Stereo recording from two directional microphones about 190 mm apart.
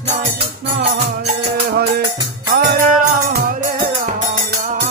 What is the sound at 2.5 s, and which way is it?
Music, 55° right (ahead or behind).